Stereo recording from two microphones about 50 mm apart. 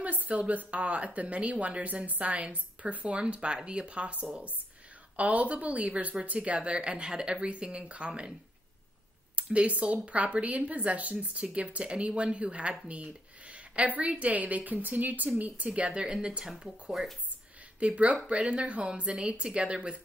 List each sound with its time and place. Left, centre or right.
0.0 s speech: right; by 16.6 s centre
17.7 s speech: right